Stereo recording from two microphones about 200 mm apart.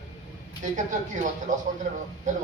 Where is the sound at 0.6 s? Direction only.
40° right (ahead or behind).